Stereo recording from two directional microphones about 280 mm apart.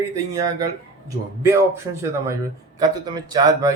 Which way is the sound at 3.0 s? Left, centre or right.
Centre.